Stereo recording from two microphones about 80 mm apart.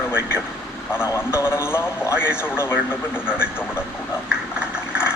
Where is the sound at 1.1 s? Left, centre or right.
Left.